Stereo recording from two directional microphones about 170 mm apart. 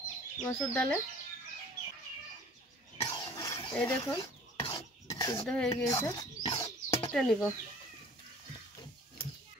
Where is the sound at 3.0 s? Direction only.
20° left (ahead or behind).